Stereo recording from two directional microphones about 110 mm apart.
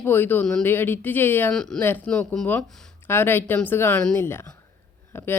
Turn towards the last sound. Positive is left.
turn(degrees=20)  # may be behind; listen again after turning